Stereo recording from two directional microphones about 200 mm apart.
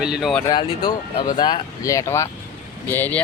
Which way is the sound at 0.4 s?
20° left (ahead or behind).